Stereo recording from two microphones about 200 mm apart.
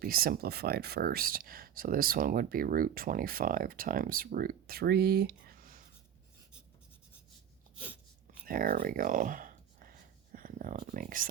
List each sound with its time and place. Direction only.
0.0 s speech: 45° right (ahead or behind)
8.4 s speech: 45° right (ahead or behind)